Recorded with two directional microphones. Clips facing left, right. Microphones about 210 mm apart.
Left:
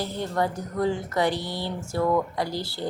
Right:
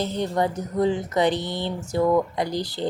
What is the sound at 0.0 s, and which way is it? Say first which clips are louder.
A woman's voice: right 3 dB; 20° right (ahead or behind).